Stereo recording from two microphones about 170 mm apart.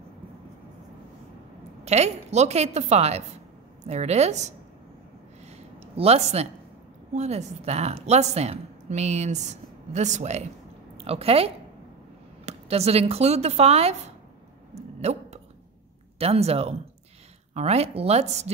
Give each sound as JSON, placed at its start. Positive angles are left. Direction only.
{"t": 1.9, "sound": "a woman's voice", "side_deg": -40}
{"t": 5.9, "sound": "a woman's voice", "side_deg": -35}
{"t": 14.7, "sound": "a sound", "side_deg": -40}
{"t": 16.2, "sound": "a woman's voice", "side_deg": -35}